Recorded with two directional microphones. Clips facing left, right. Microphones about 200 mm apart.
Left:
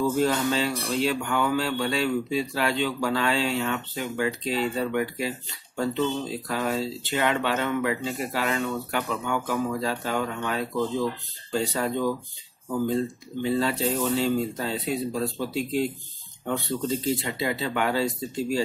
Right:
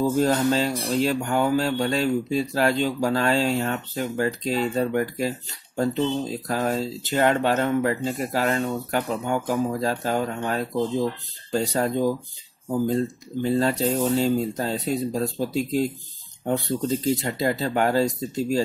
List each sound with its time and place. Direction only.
0.0 s speech: 40° right (ahead or behind)